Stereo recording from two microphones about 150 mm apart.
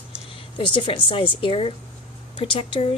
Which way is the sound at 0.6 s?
35° left (ahead or behind).